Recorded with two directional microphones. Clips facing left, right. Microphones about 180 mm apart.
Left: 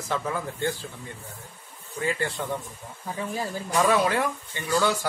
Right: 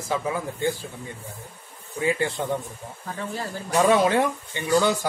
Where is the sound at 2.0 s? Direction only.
15° right (ahead or behind).